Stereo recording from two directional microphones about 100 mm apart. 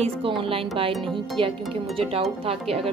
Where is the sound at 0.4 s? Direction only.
65° right (ahead or behind).